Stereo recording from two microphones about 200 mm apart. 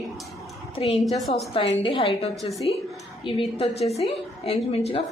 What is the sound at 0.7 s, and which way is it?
A woman's voice, 30° left (ahead or behind).